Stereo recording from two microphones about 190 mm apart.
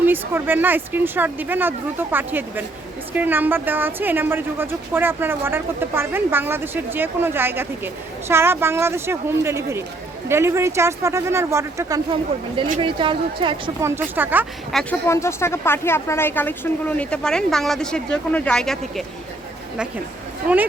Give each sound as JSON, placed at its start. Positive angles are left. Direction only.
{"t": 0.0, "sound": "a woman's voice", "side_deg": -10}
{"t": 12.8, "sound": "a woman's voice", "side_deg": -25}
{"t": 13.8, "sound": "a woman's voice", "side_deg": -10}
{"t": 14.7, "sound": "speech", "side_deg": 0}
{"t": 15.0, "sound": "speech", "side_deg": 15}